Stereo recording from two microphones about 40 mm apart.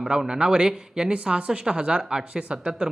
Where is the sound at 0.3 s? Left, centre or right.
Right.